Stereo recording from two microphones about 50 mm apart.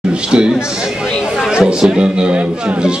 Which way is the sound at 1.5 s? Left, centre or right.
Centre.